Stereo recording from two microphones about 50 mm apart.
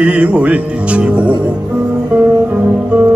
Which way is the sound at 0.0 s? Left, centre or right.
Right.